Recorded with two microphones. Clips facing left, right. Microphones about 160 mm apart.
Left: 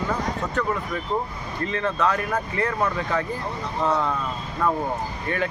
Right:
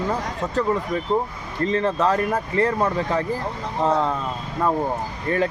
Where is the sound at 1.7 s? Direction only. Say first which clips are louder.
Right 3 dB; 35° right (ahead or behind).